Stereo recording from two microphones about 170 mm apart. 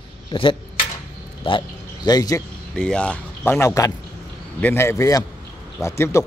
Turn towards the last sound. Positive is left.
turn(degrees=15)  # may be behind; listen again after turning